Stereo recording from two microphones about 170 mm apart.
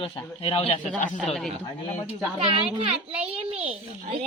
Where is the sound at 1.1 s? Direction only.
Centre (ahead or behind).